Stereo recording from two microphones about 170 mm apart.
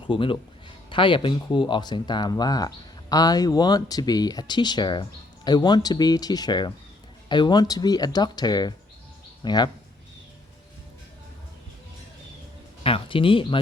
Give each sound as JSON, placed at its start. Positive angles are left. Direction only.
{"t": 0.0, "sound": "a man's voice", "side_deg": 30}
{"t": 12.8, "sound": "speech", "side_deg": 30}